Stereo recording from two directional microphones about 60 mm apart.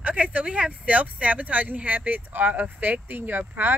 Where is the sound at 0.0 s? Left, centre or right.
Right.